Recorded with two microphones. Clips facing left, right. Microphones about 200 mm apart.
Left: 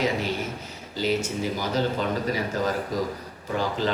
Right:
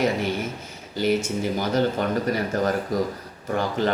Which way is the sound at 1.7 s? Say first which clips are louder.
Right 3 dB; 55° right (ahead or behind).